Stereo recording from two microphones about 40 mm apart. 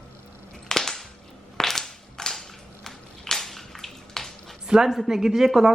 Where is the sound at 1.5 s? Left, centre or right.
Centre.